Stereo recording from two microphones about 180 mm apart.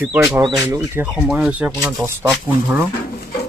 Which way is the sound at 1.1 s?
5° right (ahead or behind).